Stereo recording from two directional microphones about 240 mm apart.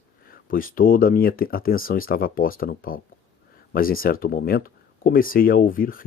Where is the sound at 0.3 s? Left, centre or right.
Left.